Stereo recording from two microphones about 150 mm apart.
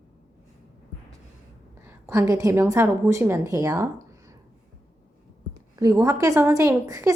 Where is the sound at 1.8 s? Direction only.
20° right (ahead or behind).